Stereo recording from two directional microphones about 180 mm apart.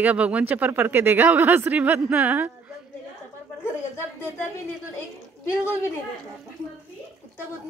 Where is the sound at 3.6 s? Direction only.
15° left (ahead or behind).